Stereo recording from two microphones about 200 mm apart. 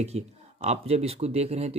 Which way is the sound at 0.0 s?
30° right (ahead or behind).